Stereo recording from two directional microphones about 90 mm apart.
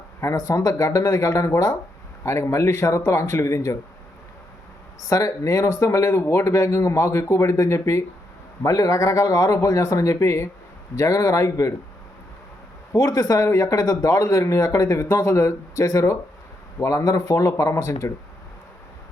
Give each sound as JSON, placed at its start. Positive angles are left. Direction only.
{"t": 0.2, "sound": "speech", "side_deg": 35}
{"t": 5.0, "sound": "speech", "side_deg": 35}
{"t": 12.9, "sound": "speech", "side_deg": 35}